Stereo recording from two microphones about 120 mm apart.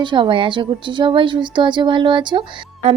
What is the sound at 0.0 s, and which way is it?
A woman's voice, 45° right (ahead or behind).